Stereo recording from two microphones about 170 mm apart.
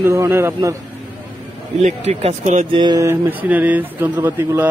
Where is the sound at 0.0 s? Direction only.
15° right (ahead or behind).